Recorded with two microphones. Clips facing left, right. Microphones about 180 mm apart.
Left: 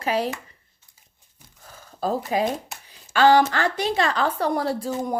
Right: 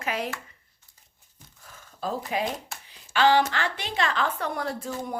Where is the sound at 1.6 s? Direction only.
40° left (ahead or behind).